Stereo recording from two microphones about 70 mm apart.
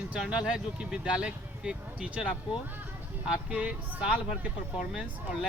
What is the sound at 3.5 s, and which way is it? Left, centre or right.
Speech, centre.